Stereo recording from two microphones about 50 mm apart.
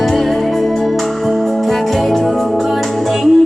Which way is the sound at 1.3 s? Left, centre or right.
Centre.